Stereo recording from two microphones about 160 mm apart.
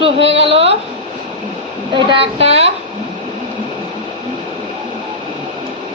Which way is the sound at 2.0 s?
30° right (ahead or behind).